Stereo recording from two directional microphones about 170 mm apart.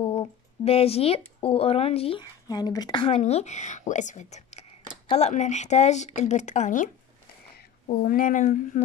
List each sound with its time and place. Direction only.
0.0 s speech: 35° left (ahead or behind)
2.4 s a woman's voice: 20° left (ahead or behind)
3.2 s a woman's voice: 40° left (ahead or behind)
8.0 s a woman's voice: 55° left (ahead or behind)